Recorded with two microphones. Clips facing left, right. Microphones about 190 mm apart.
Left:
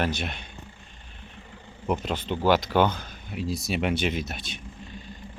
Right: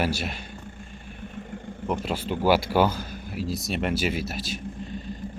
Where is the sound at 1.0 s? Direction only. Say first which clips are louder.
Right 10 dB; 50° right (ahead or behind).